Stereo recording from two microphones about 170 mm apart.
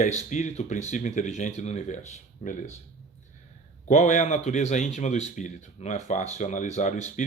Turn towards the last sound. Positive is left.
turn(degrees=45)  # may be behind; listen again after turning